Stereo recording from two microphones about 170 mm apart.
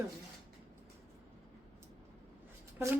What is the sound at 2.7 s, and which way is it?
Speech, 10° right (ahead or behind).